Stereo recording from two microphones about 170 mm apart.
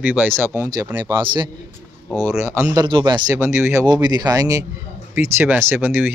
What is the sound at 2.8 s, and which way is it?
Speech, 25° right (ahead or behind).